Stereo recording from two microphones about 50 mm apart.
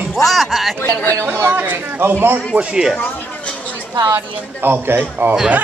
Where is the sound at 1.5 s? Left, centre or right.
Right.